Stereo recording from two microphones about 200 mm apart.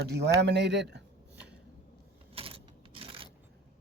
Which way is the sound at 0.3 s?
60° right (ahead or behind).